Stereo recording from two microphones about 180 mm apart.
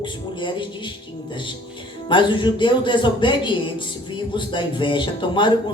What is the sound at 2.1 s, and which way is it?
Speech, 25° left (ahead or behind).